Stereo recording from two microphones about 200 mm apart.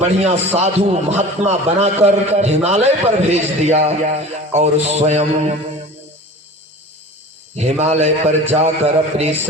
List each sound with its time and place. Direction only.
0.0 s a man's voice: 35° right (ahead or behind)
7.5 s a man's voice: 35° right (ahead or behind)